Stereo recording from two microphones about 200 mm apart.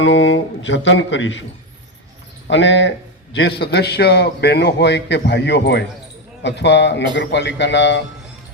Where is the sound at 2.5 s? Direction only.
65° left (ahead or behind).